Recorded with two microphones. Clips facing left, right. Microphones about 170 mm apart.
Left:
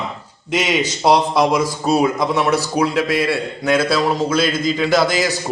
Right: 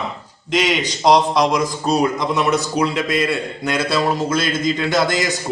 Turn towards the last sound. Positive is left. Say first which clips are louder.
# left 2 dB
turn(degrees=5)  # may be behind; listen again after turning